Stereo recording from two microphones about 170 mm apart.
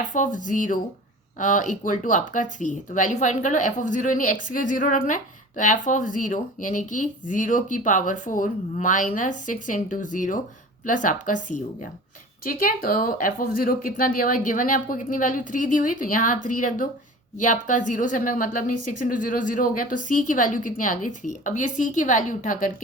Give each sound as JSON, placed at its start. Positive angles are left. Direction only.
{"t": 0.0, "sound": "speech", "side_deg": 50}